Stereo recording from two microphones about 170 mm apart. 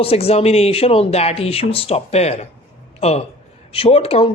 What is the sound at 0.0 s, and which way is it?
Speech, 35° left (ahead or behind).